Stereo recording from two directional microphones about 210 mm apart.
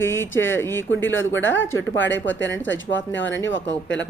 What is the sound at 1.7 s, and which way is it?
Speech, 70° left (ahead or behind).